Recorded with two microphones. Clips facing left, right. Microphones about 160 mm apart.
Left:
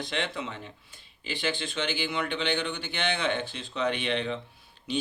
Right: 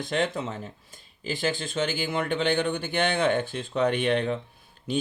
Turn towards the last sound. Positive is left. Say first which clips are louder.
# right 3 dB
turn(degrees=-50)  # may be behind; listen again after turning